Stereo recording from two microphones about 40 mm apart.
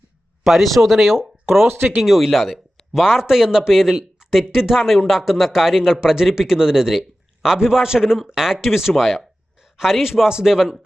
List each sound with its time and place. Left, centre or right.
0.4 s speech: centre
1.6 s speech: right
2.0 s speech: centre